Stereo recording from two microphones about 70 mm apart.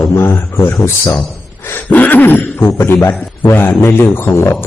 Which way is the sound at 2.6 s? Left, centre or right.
Left.